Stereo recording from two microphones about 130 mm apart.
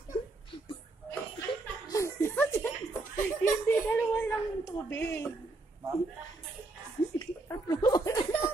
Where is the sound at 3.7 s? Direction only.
15° left (ahead or behind).